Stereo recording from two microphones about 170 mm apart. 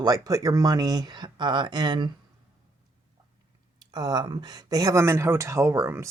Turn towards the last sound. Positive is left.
turn(degrees=-15)  # may be behind; listen again after turning